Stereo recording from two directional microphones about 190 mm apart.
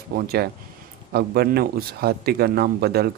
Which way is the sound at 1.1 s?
55° right (ahead or behind).